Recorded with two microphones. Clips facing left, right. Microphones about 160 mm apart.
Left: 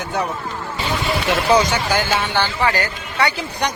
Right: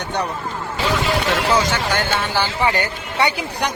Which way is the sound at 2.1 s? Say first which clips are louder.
Left 1 dB; centre (ahead or behind).